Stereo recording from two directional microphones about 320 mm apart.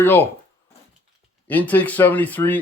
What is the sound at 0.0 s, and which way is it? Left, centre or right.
Speech, centre.